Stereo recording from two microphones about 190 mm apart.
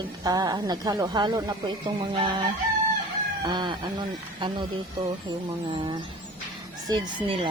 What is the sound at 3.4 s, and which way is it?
Speech, 25° right (ahead or behind).